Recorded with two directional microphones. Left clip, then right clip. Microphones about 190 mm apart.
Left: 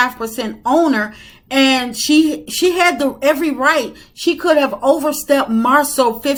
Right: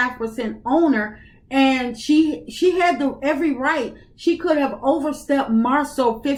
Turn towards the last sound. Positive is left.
turn(degrees=15)  # may be behind; listen again after turning